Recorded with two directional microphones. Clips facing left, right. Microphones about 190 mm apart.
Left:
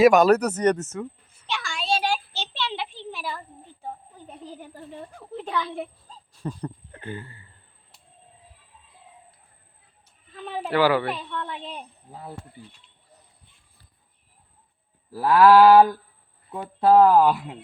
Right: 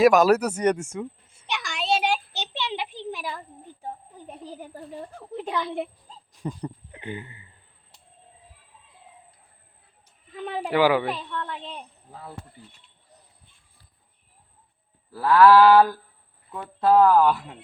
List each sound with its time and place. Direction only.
0.0 s speech: centre (ahead or behind)
1.3 s a sound: 20° right (ahead or behind)
4.3 s speech: 10° right (ahead or behind)
10.3 s speech: 15° right (ahead or behind)
11.0 s a woman's voice: 5° left (ahead or behind)
15.1 s speech: 20° left (ahead or behind)